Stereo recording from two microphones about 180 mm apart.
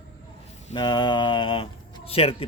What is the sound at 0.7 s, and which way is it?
Speech, 25° left (ahead or behind).